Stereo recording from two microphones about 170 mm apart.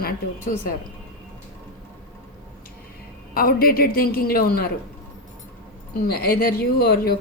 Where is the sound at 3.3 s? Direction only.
60° left (ahead or behind).